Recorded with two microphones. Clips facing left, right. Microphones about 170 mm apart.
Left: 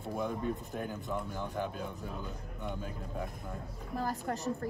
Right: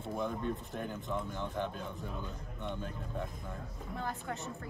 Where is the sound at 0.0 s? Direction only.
Centre (ahead or behind).